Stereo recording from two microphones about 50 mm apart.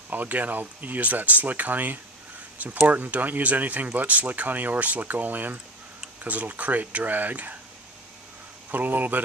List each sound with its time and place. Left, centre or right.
0.1 s speech: right
8.7 s speech: right